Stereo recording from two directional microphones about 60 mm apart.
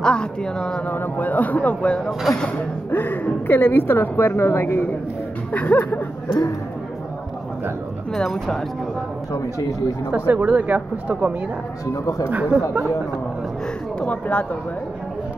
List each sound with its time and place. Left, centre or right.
0.0 s speech: centre
0.8 s speech: left
2.3 s speech: centre
2.9 s a woman's voice: left
5.5 s speech: left
8.1 s speech: centre
9.3 s speech: left
10.1 s speech: right
11.9 s speech: left
12.3 s speech: right
13.9 s speech: left